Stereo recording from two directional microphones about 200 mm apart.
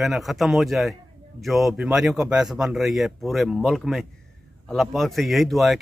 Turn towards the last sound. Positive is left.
turn(degrees=0)  # may be behind; listen again after turning